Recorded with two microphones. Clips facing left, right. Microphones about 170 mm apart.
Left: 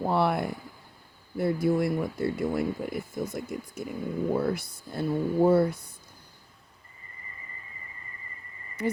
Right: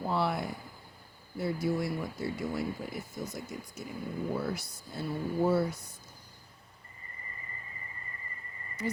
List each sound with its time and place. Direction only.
0.0 s speech: 60° left (ahead or behind)
8.8 s speech: 60° left (ahead or behind)